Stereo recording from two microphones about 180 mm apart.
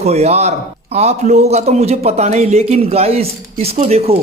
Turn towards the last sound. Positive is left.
turn(degrees=-35)  # may be behind; listen again after turning